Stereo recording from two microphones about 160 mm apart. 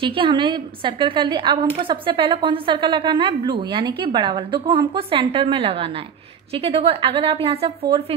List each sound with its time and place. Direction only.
0.0 s a woman's voice: 30° right (ahead or behind)